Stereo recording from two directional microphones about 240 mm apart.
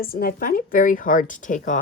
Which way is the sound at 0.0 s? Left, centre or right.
Left.